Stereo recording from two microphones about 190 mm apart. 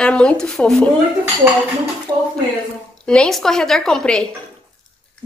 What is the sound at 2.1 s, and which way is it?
Speech, 20° right (ahead or behind).